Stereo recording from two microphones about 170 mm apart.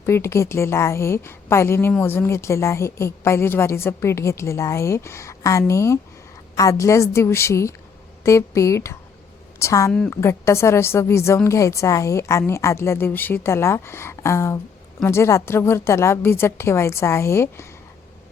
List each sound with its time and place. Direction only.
0.0 s a woman's voice: 15° left (ahead or behind)